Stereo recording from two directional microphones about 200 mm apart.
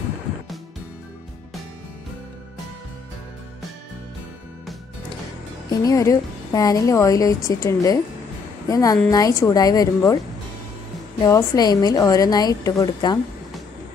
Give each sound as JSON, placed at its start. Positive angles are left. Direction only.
{"t": 5.7, "sound": "a woman's voice", "side_deg": 20}
{"t": 11.1, "sound": "a woman's voice", "side_deg": 20}